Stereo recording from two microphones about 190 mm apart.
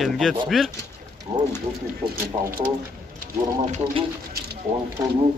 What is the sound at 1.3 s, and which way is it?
Speech, 15° right (ahead or behind).